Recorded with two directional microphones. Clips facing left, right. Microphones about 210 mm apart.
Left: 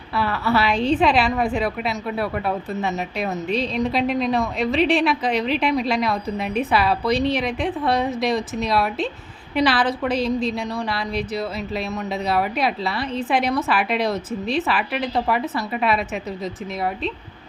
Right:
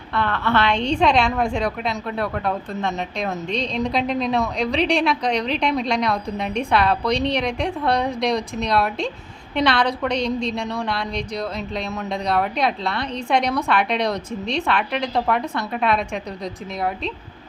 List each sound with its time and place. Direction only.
0.2 s a woman's voice: 5° left (ahead or behind)